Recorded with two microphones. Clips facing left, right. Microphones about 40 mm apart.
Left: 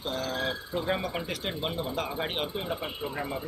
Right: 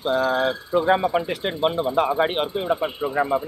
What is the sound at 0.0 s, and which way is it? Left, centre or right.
Speech, right.